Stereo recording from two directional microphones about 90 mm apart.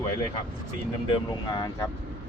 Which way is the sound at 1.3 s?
50° left (ahead or behind).